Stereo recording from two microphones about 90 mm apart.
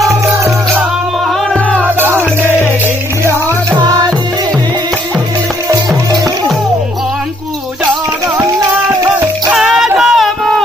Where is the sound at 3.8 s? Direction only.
50° right (ahead or behind).